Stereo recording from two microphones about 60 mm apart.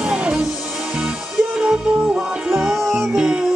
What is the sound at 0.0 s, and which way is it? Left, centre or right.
Music, centre.